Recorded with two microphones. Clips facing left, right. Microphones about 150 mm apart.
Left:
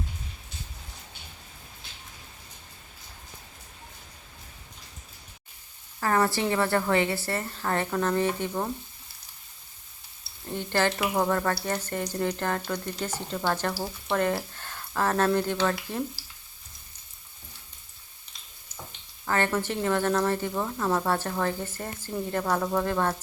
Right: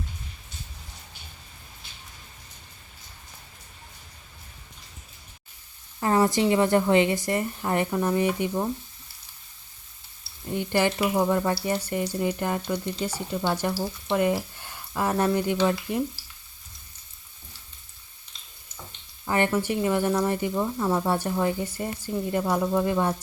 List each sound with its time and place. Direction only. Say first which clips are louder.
6.0 s a woman's voice: right 3 dB; 20° right (ahead or behind)
10.5 s a woman's voice: right 2 dB; 15° right (ahead or behind)
11.0 s speech: right 3 dB; 5° right (ahead or behind)
11.3 s a woman's voice: right 2 dB; 15° right (ahead or behind)
14.5 s a sound: even; 10° right (ahead or behind)
15.4 s a woman's voice: right 3 dB; 15° right (ahead or behind)
19.2 s a woman's voice: right 2 dB; 15° right (ahead or behind)